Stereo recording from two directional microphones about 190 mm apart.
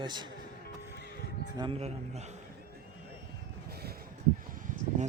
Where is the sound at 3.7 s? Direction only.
55° right (ahead or behind).